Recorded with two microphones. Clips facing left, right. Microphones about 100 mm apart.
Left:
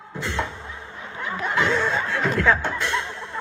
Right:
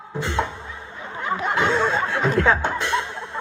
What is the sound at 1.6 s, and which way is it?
Speech, 20° right (ahead or behind).